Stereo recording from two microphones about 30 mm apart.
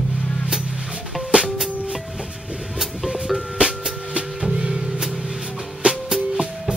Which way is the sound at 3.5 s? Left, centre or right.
Right.